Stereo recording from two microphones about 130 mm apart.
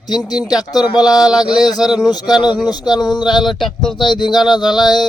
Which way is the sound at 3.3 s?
Centre (ahead or behind).